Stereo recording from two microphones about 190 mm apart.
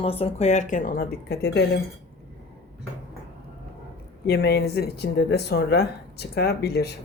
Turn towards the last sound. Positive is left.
turn(degrees=60)  # may be behind; listen again after turning